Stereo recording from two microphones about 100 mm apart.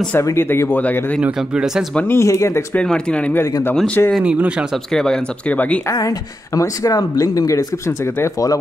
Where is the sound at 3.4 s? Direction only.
25° left (ahead or behind).